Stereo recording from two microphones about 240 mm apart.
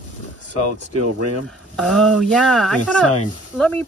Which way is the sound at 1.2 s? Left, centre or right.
Right.